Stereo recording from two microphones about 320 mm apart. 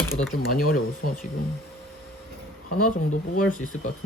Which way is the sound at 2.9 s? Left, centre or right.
Left.